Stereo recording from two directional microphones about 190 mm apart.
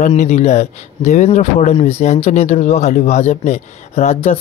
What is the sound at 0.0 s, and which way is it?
Speech, 40° left (ahead or behind).